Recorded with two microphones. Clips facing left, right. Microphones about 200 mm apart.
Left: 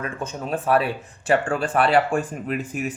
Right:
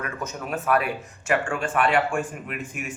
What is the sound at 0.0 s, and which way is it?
Speech, 30° left (ahead or behind).